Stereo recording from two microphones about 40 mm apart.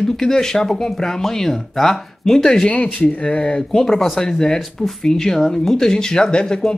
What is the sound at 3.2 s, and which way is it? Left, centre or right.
Speech, left.